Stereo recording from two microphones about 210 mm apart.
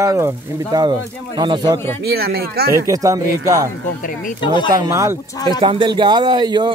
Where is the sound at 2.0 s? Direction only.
50° right (ahead or behind).